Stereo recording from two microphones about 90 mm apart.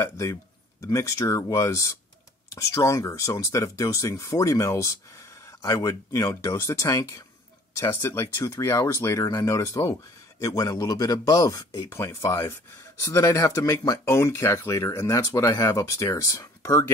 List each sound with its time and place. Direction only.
0.0 s speech: 35° left (ahead or behind)